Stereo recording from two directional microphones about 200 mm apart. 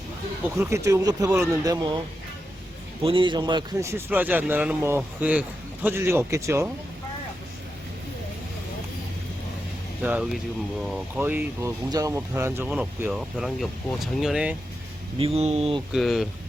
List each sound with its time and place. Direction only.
0.5 s a man's voice: 15° right (ahead or behind)
3.0 s a man's voice: 25° right (ahead or behind)
10.0 s a man's voice: 5° right (ahead or behind)
15.2 s speech: 30° right (ahead or behind)
15.9 s speech: centre (ahead or behind)